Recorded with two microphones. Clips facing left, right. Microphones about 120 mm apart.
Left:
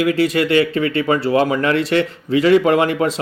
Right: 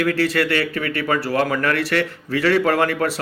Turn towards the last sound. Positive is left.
turn(degrees=20)  # may be behind; listen again after turning